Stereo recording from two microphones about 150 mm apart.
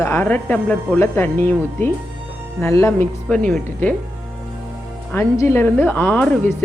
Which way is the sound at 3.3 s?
5° left (ahead or behind).